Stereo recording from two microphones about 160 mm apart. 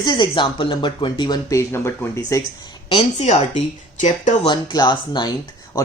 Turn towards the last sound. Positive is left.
turn(degrees=25)  # may be behind; listen again after turning